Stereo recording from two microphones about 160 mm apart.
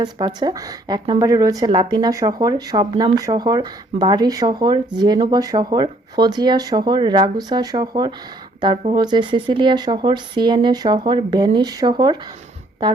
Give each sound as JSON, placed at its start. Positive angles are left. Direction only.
{"t": 0.0, "sound": "speech", "side_deg": -25}